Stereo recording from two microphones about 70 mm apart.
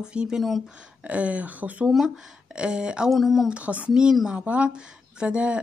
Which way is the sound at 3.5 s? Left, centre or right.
Centre.